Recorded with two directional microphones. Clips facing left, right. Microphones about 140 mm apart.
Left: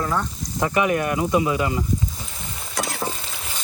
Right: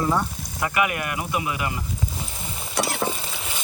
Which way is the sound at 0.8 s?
30° left (ahead or behind).